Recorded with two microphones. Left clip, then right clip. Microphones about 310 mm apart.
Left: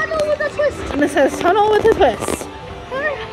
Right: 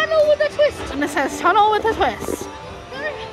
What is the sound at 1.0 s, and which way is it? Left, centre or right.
Speech, centre.